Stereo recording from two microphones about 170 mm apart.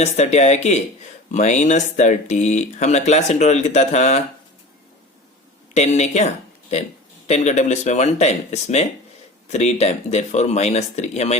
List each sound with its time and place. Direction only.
0.0 s speech: 40° left (ahead or behind)
5.7 s speech: 40° left (ahead or behind)